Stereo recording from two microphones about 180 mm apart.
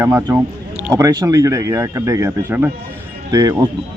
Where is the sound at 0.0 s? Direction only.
15° right (ahead or behind).